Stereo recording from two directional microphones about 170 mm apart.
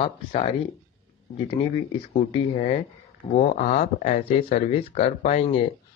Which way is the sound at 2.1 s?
35° left (ahead or behind).